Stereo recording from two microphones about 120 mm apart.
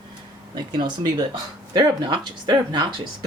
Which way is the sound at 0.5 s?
35° right (ahead or behind).